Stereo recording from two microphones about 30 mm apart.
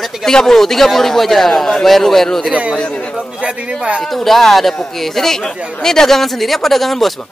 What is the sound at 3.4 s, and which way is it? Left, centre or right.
Speech, right.